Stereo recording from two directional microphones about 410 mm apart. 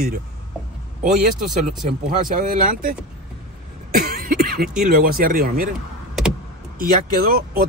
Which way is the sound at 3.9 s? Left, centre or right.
Right.